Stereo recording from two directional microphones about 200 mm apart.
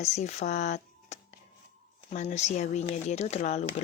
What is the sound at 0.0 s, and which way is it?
Speech, 35° left (ahead or behind).